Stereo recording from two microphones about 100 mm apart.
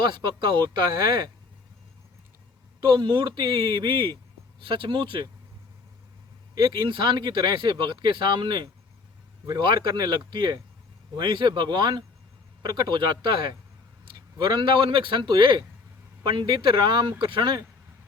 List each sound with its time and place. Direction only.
0.0 s speech: 50° right (ahead or behind)
3.0 s speech: 55° right (ahead or behind)
6.5 s speech: 40° right (ahead or behind)